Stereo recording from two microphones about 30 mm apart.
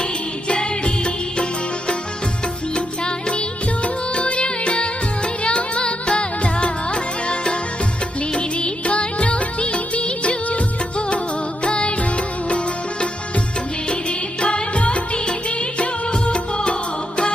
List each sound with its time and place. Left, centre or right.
0.0 s music: left
2.7 s music: left
3.8 s music: left
14.1 s music: left